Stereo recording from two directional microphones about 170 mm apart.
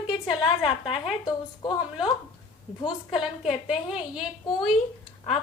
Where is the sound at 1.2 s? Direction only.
25° left (ahead or behind).